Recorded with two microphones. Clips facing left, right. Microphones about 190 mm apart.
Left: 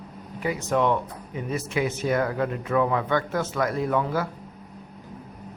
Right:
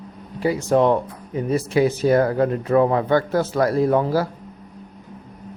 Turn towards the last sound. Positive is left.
turn(degrees=-35)  # may be behind; listen again after turning